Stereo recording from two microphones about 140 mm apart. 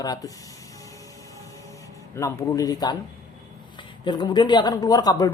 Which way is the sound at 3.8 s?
35° left (ahead or behind).